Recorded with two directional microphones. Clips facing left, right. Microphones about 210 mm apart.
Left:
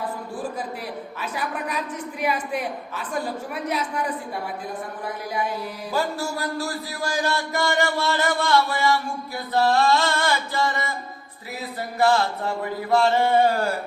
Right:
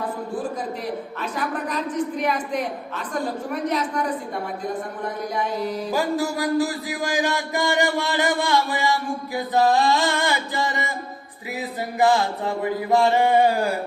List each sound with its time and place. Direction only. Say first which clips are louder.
1.2 s a woman's voice: right 1 dB; 10° left (ahead or behind)
5.9 s a man's voice: right 1 dB; 15° right (ahead or behind)
11.9 s a man's voice: right 1 dB; 15° right (ahead or behind)